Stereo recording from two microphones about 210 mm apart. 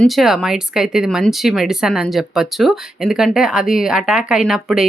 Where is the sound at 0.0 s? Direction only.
Centre (ahead or behind).